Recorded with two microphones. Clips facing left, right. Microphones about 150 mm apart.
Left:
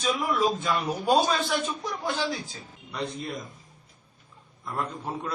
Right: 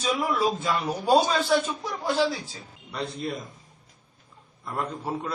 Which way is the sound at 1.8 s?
5° right (ahead or behind).